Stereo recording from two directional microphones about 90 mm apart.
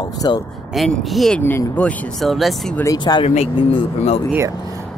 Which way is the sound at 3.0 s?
60° left (ahead or behind).